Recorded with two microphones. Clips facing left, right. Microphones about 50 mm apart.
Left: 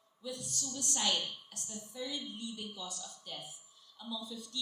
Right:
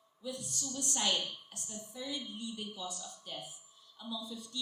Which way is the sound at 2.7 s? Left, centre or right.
Right.